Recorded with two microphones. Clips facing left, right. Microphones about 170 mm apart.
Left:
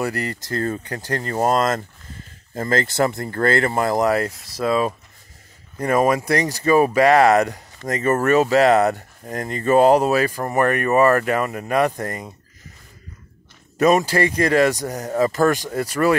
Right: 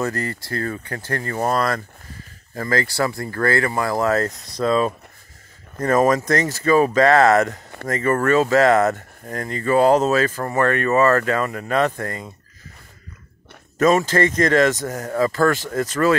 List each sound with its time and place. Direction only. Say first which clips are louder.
0.0 s speech: even; 15° left (ahead or behind)
13.7 s speech: even; 15° left (ahead or behind)